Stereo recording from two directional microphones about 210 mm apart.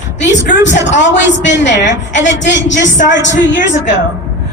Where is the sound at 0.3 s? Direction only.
60° left (ahead or behind).